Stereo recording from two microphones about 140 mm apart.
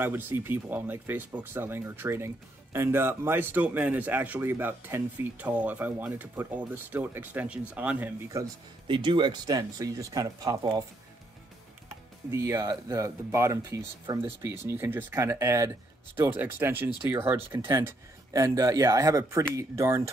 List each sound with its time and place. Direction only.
0.0 s speech: 15° right (ahead or behind)
8.3 s speech: 20° right (ahead or behind)
8.8 s speech: 35° right (ahead or behind)
12.3 s speech: 20° right (ahead or behind)